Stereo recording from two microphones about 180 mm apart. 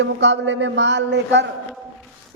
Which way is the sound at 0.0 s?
85° right.